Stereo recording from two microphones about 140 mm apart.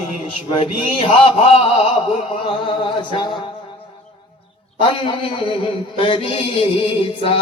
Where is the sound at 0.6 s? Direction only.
45° left (ahead or behind).